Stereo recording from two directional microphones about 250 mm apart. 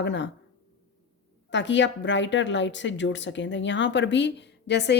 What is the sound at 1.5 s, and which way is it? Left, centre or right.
A woman's voice, left.